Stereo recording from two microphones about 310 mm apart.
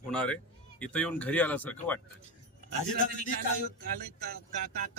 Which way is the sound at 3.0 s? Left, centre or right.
Left.